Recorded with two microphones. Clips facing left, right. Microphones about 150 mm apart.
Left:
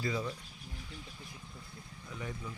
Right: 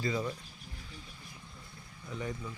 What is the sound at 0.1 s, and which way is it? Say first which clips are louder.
Speech: right 2 dB; 5° right (ahead or behind).